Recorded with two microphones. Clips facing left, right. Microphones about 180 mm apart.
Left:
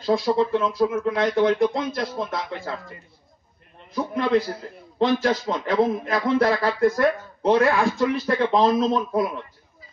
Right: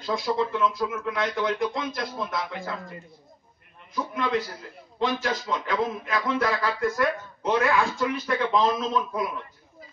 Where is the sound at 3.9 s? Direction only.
35° left (ahead or behind).